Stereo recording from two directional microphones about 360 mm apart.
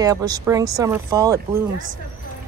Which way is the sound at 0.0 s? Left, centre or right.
Centre.